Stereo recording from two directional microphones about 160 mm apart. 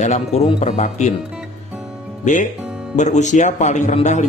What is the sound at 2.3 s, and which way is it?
Speech, 50° left (ahead or behind).